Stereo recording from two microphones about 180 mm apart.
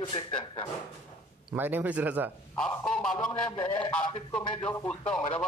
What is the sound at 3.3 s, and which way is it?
Speech, 25° left (ahead or behind).